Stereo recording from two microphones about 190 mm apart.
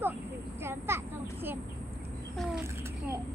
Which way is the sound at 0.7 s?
15° right (ahead or behind).